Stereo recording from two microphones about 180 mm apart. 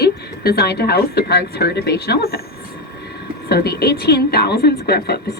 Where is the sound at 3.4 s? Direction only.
65° left (ahead or behind).